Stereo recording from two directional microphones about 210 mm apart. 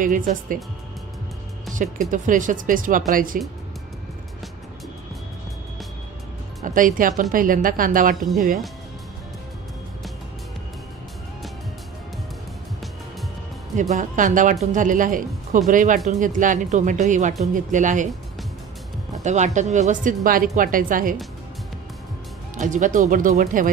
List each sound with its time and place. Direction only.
0.0 s speech: 40° right (ahead or behind)
1.7 s speech: 40° right (ahead or behind)
6.6 s speech: 40° right (ahead or behind)
13.7 s speech: 35° right (ahead or behind)
19.2 s speech: 35° right (ahead or behind)
22.6 s speech: 35° right (ahead or behind)